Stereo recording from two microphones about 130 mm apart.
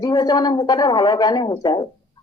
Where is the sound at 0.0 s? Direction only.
35° left (ahead or behind).